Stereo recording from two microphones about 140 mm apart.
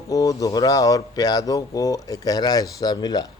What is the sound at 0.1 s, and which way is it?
Speech, 25° left (ahead or behind).